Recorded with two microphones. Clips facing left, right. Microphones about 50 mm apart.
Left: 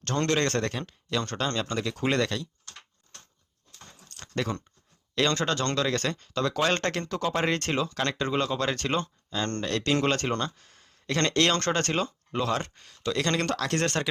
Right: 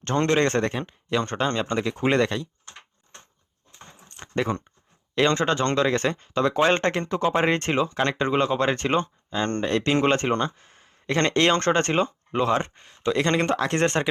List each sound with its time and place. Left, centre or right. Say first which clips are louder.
0.0 s speech: right 5 dB; right
3.7 s keys jangling: right 3 dB; right
5.1 s speech: right 5 dB; right